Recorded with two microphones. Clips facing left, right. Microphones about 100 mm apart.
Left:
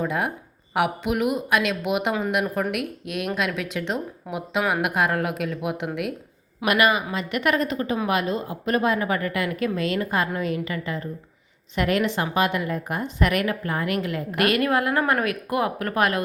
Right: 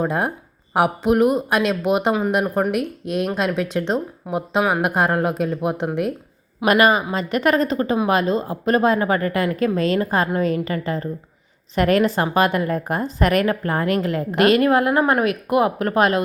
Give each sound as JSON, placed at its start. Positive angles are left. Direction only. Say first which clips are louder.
{"t": 0.0, "sound": "a woman's voice", "louder": "right 4 dB", "side_deg": -35}
{"t": 14.3, "sound": "speech", "louder": "right 6 dB", "side_deg": -25}